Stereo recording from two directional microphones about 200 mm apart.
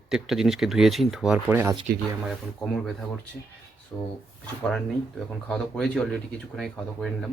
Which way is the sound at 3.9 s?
10° left (ahead or behind).